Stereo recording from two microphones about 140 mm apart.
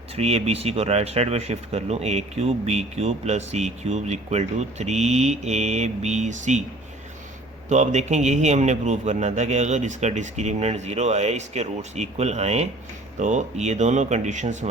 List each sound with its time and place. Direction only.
0.2 s speech: 50° right (ahead or behind)
7.7 s a man's voice: 55° right (ahead or behind)